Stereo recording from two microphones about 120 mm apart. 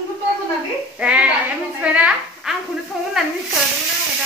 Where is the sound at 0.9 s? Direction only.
10° right (ahead or behind).